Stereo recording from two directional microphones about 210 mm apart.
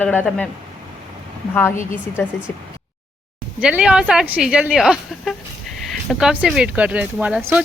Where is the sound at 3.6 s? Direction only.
5° right (ahead or behind).